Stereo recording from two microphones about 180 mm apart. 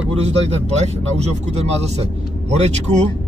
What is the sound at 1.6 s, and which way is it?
Speech, 35° right (ahead or behind).